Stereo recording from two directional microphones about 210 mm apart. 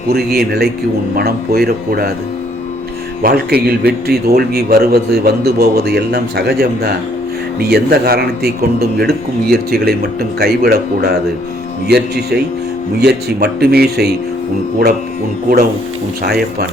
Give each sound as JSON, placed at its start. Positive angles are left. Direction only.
{"t": 0.1, "sound": "a man's voice", "side_deg": -50}
{"t": 3.2, "sound": "a man's voice", "side_deg": -45}
{"t": 16.2, "sound": "a man's voice", "side_deg": -45}